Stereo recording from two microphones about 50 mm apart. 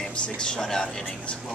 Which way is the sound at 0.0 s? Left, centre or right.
Centre.